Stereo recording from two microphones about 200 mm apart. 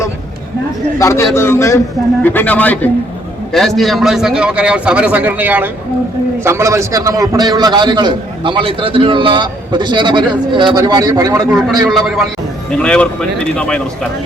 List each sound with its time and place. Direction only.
0.9 s a man's voice: 15° left (ahead or behind); by 11.4 s 20° right (ahead or behind)
11.9 s a man's voice: centre (ahead or behind)